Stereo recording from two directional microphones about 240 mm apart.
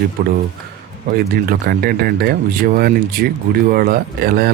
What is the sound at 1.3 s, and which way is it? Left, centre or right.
Speech, right.